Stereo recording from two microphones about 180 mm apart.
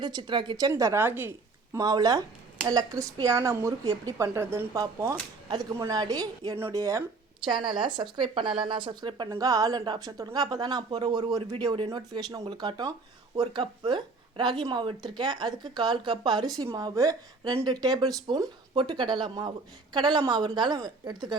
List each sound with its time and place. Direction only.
0.0 s speech: 25° right (ahead or behind)
0.7 s speech: 15° right (ahead or behind)
1.7 s speech: 20° right (ahead or behind)